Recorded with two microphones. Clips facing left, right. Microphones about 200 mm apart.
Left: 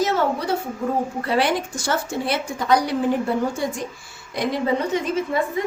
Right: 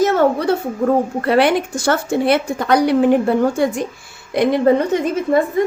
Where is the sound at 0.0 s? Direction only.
55° right (ahead or behind).